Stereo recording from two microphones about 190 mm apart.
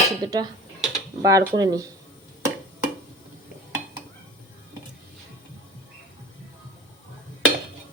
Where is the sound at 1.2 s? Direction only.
15° right (ahead or behind).